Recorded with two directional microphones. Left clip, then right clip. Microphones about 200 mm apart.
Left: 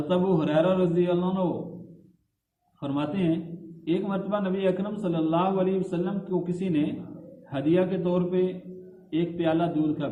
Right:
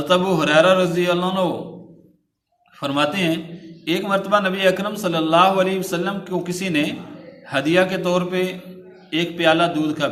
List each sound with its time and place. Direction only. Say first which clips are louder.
0.1 s a man's voice: right 8 dB; 20° right (ahead or behind)
2.8 s a man's voice: right 9 dB; 15° right (ahead or behind)